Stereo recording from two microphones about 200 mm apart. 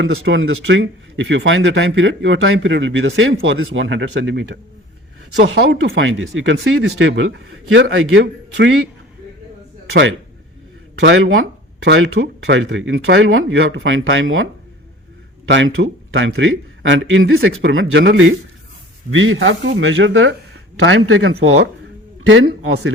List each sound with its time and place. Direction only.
0.0 s speech: 75° right (ahead or behind)
11.0 s speech: 80° right
15.4 s speech: 65° right (ahead or behind); by 22.9 s 85° right